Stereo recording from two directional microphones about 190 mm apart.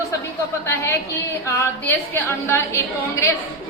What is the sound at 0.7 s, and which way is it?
A woman's voice, 10° left (ahead or behind).